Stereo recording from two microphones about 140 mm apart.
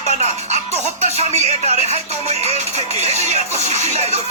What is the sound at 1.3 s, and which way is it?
Music, 50° right (ahead or behind).